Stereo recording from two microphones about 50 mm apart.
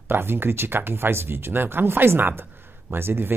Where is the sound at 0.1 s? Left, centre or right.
Right.